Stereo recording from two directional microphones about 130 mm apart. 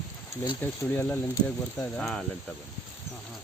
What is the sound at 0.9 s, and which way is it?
Speech, 15° left (ahead or behind).